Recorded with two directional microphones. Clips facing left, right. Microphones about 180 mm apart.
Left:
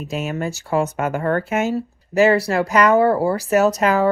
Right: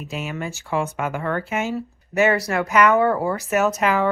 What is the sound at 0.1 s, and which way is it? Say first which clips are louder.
Speech: left 5 dB; 40° left (ahead or behind).